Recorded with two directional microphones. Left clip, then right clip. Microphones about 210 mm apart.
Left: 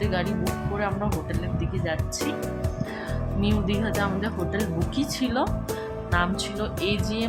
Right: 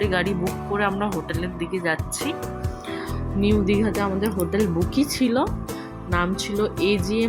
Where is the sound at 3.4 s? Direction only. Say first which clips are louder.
Right 7 dB; 15° right (ahead or behind).